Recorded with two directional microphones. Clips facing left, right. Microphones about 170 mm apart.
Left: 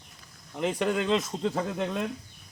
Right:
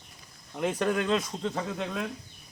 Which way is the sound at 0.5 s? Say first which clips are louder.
Even; 15° left (ahead or behind).